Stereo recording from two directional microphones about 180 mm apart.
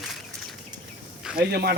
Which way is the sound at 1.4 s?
60° right (ahead or behind).